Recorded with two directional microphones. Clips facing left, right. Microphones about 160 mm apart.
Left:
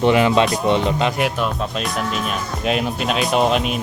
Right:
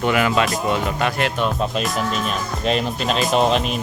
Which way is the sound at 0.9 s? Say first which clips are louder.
Left 2 dB; 20° left (ahead or behind).